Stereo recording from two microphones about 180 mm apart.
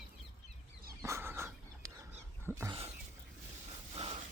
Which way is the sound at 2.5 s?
15° right (ahead or behind).